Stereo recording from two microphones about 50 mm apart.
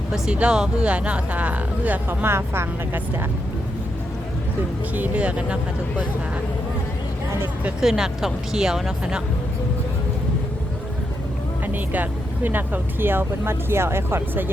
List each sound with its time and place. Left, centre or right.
0.3 s speech: centre
2.0 s speech: right
4.9 s speech: right
7.8 s speech: centre
11.6 s speech: right